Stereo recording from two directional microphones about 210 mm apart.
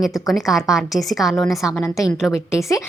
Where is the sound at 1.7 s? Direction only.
10° left (ahead or behind).